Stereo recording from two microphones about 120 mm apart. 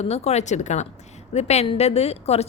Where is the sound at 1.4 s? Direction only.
65° left (ahead or behind).